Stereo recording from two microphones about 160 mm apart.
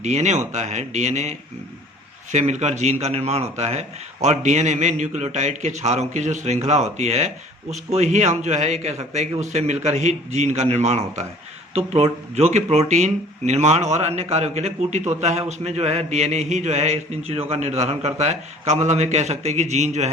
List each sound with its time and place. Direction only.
0.0 s speech: 45° right (ahead or behind)